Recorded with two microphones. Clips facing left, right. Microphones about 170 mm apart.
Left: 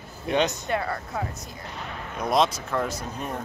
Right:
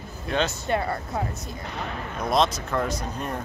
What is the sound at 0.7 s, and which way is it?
Speech, 25° right (ahead or behind).